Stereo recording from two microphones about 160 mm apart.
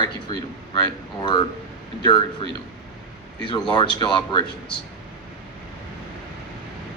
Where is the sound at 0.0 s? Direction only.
30° left (ahead or behind).